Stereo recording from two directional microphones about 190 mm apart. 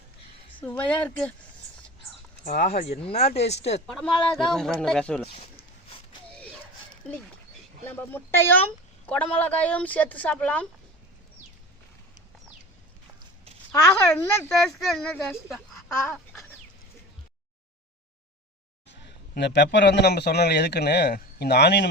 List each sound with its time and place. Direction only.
0.8 s speech: 5° left (ahead or behind)
2.4 s speech: 50° left (ahead or behind)
2.6 s speech: 35° left (ahead or behind)
3.8 s speech: 5° left (ahead or behind)
7.9 s speech: 10° left (ahead or behind)
14.1 s speech: 10° left (ahead or behind)
14.8 s a woman's voice: centre (ahead or behind)
18.9 s a man's voice: 65° left (ahead or behind)